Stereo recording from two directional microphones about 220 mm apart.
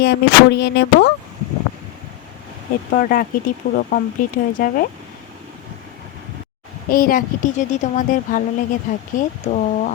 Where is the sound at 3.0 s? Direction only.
40° left (ahead or behind).